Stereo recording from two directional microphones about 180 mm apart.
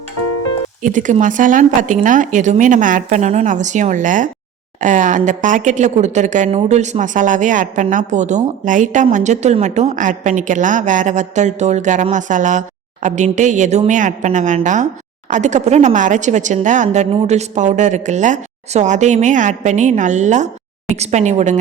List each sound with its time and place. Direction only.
0.8 s a woman's voice: 45° right (ahead or behind)